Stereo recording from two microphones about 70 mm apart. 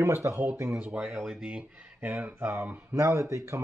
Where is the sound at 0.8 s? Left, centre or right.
Centre.